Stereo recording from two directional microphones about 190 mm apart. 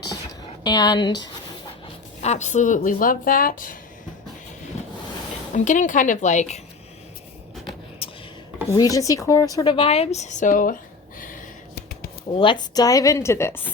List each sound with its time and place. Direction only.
0.6 s speech: 20° left (ahead or behind)
2.2 s speech: 35° left (ahead or behind)
5.5 s speech: 40° left (ahead or behind)
8.7 s speech: 15° left (ahead or behind); by 10.8 s 45° left (ahead or behind)
11.2 s a sound: 50° left (ahead or behind)
12.4 s a woman's voice: 25° left (ahead or behind)